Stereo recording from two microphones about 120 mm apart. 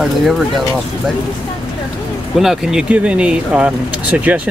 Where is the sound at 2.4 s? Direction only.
5° right (ahead or behind).